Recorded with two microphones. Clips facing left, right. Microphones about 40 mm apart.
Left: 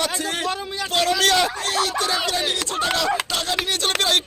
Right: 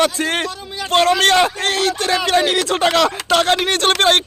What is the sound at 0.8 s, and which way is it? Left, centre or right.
Speech, right.